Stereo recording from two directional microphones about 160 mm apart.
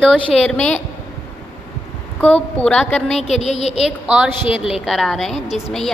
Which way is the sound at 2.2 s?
10° left (ahead or behind).